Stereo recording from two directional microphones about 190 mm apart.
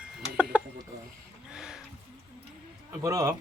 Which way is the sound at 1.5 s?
5° right (ahead or behind).